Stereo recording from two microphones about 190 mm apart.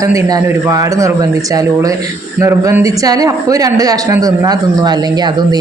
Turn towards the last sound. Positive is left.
turn(degrees=-20)  # may be behind; listen again after turning